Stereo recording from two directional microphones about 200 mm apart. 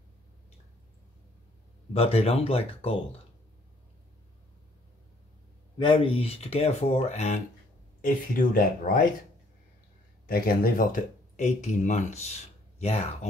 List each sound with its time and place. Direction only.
2.0 s speech: 30° left (ahead or behind)
5.8 s speech: 25° left (ahead or behind)
8.0 s speech: 45° left (ahead or behind)
10.2 s speech: 45° left (ahead or behind)